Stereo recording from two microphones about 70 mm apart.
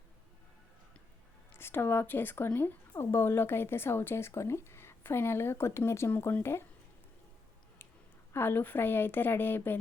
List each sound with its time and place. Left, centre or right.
1.5 s a woman's voice: left
8.3 s a woman's voice: left